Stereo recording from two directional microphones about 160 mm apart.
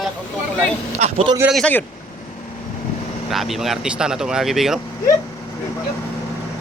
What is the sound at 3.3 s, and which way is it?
Speech, centre (ahead or behind).